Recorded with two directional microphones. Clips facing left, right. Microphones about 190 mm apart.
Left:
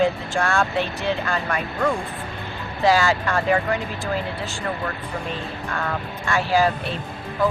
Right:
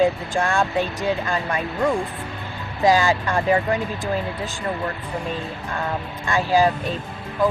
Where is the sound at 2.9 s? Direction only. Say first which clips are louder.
Right 1 dB; 15° right (ahead or behind).